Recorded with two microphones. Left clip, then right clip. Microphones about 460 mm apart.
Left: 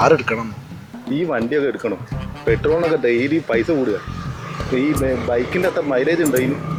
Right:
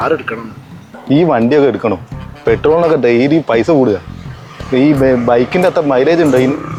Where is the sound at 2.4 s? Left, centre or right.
Right.